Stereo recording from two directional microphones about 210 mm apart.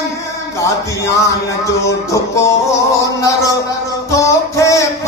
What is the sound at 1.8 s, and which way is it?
Music, 15° left (ahead or behind).